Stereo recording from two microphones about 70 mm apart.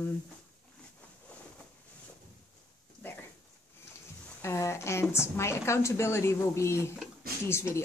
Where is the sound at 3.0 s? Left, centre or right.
Left.